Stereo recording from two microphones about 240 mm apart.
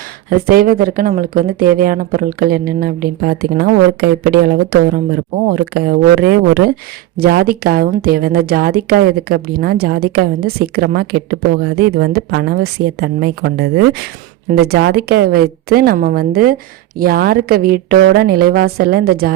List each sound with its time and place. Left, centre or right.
0.3 s a woman's voice: right